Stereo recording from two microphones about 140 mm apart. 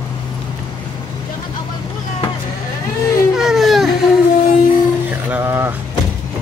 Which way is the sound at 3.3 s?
Centre (ahead or behind).